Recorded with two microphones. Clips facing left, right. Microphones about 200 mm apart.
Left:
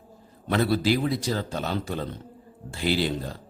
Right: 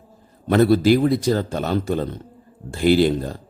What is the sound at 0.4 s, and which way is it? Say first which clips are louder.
A man's voice: right 8 dB; 50° right (ahead or behind).